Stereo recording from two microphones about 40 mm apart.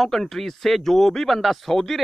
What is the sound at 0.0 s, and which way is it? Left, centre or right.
Speech, centre.